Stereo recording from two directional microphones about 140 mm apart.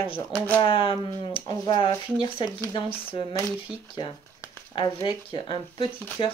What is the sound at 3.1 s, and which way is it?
Speech, 35° left (ahead or behind).